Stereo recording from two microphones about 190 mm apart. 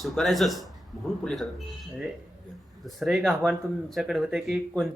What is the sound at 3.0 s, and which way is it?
Speech, centre (ahead or behind).